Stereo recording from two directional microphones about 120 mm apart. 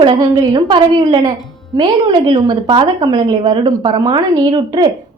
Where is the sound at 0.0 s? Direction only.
40° right (ahead or behind).